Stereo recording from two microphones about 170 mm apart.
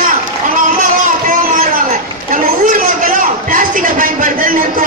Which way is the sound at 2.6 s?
50° right (ahead or behind).